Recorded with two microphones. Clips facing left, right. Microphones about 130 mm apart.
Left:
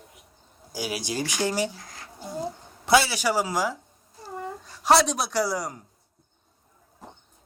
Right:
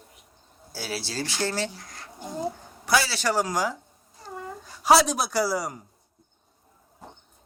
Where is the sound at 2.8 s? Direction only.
20° left (ahead or behind); by 5.8 s centre (ahead or behind).